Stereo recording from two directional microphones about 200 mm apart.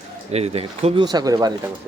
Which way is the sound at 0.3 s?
30° right (ahead or behind).